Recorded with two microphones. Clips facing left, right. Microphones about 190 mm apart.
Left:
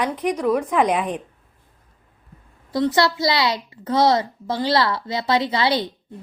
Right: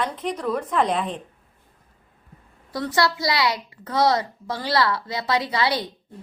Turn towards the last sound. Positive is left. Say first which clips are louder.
# left 3 dB
turn(degrees=25)  # may be behind; listen again after turning